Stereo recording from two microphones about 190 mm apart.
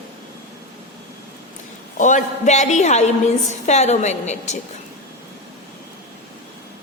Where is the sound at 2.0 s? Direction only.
40° left (ahead or behind).